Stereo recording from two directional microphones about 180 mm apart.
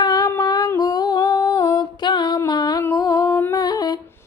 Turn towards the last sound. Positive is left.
turn(degrees=20)  # may be behind; listen again after turning